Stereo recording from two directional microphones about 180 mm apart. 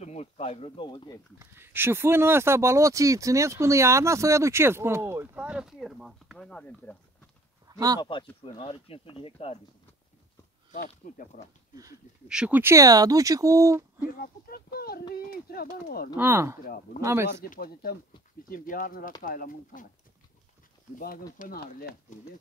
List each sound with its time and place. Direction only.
0.0 s speech: 35° left (ahead or behind)
1.4 s speech: 15° right (ahead or behind); by 7.0 s 5° left (ahead or behind)
7.6 s a sound: 20° right (ahead or behind)
8.0 s speech: 25° left (ahead or behind)
10.7 s speech: 45° left (ahead or behind)
11.7 s speech: 20° right (ahead or behind)
12.3 s speech: 5° right (ahead or behind)
14.1 s speech: 55° left (ahead or behind)
16.2 s speech: 15° right (ahead or behind)
16.6 s speech: 55° left (ahead or behind)
17.0 s speech: 15° right (ahead or behind)
17.4 s speech: 55° left (ahead or behind)
21.4 s speech: 50° left (ahead or behind)